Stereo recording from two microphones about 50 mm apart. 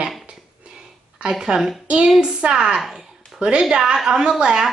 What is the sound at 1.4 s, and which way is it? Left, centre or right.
A woman's voice, centre.